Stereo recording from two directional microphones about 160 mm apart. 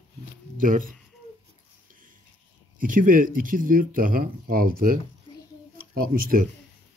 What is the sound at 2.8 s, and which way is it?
Speech, 60° right (ahead or behind).